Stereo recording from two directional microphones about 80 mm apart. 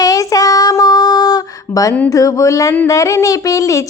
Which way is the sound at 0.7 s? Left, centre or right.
Left.